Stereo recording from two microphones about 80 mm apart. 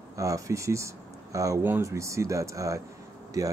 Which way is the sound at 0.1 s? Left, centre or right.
Right.